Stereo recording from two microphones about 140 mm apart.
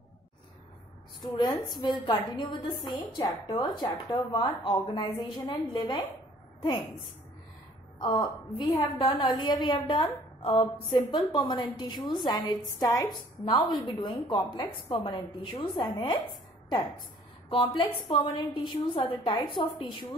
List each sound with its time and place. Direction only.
1.3 s a woman's voice: 30° left (ahead or behind)
8.0 s a woman's voice: 30° left (ahead or behind)
17.5 s a woman's voice: 35° left (ahead or behind)